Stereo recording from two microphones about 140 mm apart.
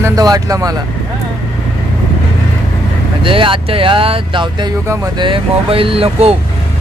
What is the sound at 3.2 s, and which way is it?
Speech, 40° right (ahead or behind).